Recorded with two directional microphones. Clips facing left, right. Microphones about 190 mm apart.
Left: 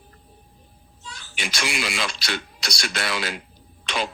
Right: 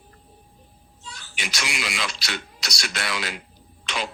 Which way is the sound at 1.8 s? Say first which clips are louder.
Left 2 dB; 30° left (ahead or behind).